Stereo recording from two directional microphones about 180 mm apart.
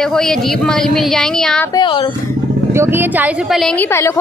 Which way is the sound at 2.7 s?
15° right (ahead or behind).